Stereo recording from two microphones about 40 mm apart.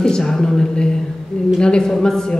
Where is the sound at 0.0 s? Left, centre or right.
Centre.